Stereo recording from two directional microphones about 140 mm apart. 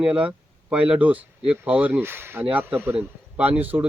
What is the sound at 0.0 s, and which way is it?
Speech, 10° right (ahead or behind).